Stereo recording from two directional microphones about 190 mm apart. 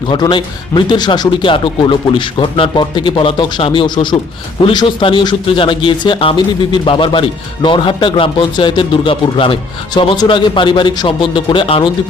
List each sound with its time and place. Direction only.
0.1 s speech: 25° left (ahead or behind)